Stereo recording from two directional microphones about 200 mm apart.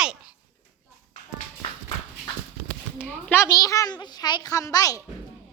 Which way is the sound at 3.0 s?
10° left (ahead or behind).